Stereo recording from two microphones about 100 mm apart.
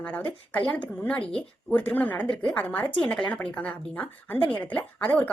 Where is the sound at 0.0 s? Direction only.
15° left (ahead or behind).